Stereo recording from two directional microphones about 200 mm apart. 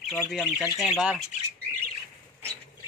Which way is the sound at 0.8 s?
5° right (ahead or behind).